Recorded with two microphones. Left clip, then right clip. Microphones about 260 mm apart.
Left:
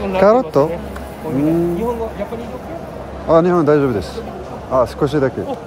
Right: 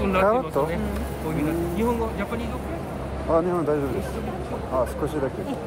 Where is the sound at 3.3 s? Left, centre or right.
Left.